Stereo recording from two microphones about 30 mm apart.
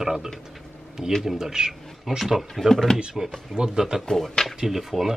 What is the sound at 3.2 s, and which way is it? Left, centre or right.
Speech, centre.